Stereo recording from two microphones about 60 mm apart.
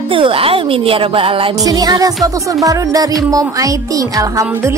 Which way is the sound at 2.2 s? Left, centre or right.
Right.